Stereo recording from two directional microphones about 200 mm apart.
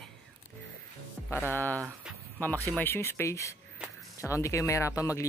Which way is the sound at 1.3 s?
10° left (ahead or behind).